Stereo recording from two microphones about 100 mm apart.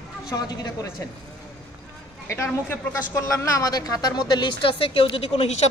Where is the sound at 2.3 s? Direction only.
25° left (ahead or behind).